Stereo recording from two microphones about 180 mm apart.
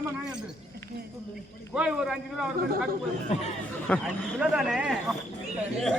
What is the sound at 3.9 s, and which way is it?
A man's voice, 10° left (ahead or behind).